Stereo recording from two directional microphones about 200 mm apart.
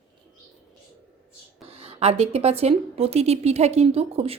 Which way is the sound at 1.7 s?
30° right (ahead or behind).